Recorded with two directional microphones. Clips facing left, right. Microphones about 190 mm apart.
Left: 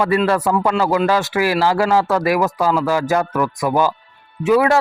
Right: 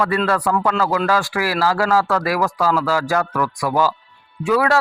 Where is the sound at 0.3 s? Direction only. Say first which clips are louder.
Left 2 dB; 20° left (ahead or behind).